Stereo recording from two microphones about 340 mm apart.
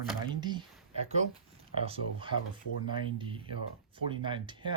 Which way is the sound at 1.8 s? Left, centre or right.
Centre.